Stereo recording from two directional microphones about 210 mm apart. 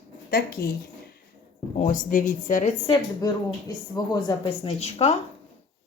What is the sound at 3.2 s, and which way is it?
A woman's voice, 20° left (ahead or behind).